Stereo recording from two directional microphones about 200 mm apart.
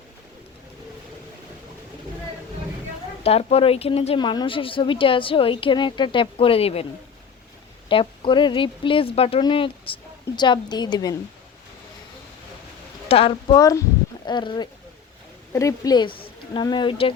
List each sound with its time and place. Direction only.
3.2 s speech: 30° left (ahead or behind)
7.9 s speech: 25° left (ahead or behind)
13.1 s speech: 30° left (ahead or behind)